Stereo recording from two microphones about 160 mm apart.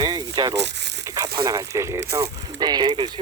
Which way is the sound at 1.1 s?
20° right (ahead or behind).